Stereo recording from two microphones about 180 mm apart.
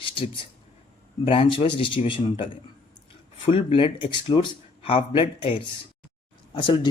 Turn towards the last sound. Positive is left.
turn(degrees=25)  # may be behind; listen again after turning